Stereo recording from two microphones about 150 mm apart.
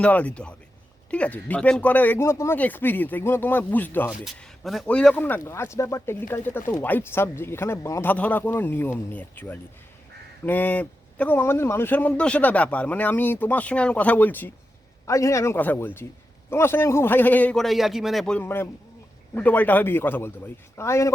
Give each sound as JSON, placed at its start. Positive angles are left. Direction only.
{"t": 0.0, "sound": "speech", "side_deg": 10}
{"t": 4.4, "sound": "speech", "side_deg": 0}